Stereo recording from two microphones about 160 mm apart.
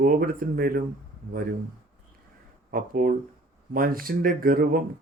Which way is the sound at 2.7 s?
60° right (ahead or behind).